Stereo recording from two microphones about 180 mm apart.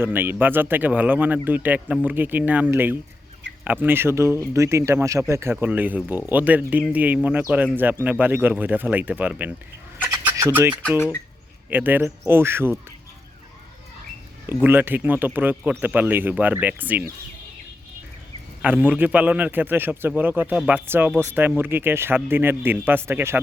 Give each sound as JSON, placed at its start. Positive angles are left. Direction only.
{"t": 0.0, "sound": "speech", "side_deg": -10}
{"t": 10.0, "sound": "chicken", "side_deg": -10}
{"t": 10.8, "sound": "speech", "side_deg": 5}
{"t": 11.7, "sound": "speech", "side_deg": -10}
{"t": 14.5, "sound": "speech", "side_deg": -10}
{"t": 18.6, "sound": "speech", "side_deg": -10}